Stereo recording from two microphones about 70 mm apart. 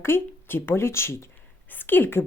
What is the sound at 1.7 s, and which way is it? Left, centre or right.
Speech, left.